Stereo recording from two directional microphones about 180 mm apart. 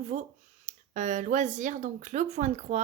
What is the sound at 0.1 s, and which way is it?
Speech, 45° right (ahead or behind).